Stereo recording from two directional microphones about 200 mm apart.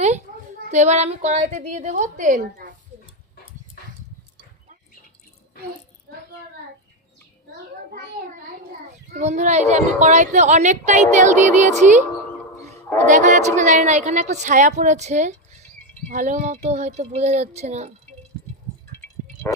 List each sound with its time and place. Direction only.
0.7 s a woman's voice: 35° right (ahead or behind)
9.1 s a woman's voice: 35° right (ahead or behind)